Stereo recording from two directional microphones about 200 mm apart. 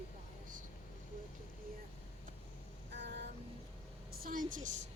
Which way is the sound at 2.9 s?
60° right (ahead or behind).